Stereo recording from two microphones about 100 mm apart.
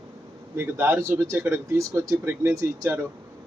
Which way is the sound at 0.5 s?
20° right (ahead or behind).